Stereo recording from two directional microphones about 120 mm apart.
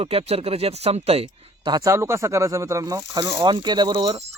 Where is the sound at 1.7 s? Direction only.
25° right (ahead or behind).